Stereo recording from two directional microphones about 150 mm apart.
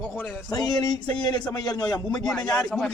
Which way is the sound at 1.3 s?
30° left (ahead or behind).